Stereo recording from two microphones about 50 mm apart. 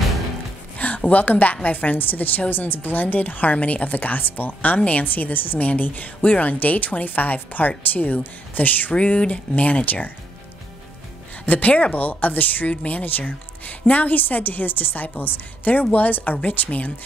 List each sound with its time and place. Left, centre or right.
0.7 s a woman's voice: left
11.4 s a woman's voice: left